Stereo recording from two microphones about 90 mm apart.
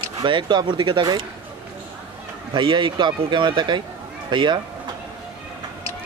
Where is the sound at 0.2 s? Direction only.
60° right (ahead or behind).